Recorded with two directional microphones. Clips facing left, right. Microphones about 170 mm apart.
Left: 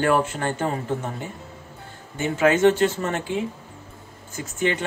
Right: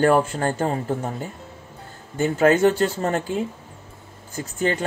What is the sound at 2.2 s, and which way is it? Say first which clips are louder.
Speech: right 2 dB; 40° right (ahead or behind).